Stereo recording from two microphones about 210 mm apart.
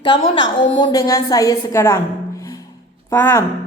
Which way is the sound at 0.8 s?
15° left (ahead or behind).